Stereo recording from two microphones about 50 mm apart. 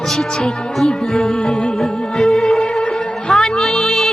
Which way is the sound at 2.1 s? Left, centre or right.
Centre.